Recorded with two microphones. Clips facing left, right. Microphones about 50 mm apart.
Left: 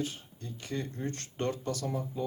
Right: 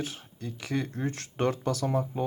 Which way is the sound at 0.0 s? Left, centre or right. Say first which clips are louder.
Right 1 dB; right.